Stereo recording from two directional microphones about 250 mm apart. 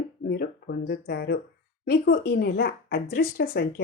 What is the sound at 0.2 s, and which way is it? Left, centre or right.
Speech, left.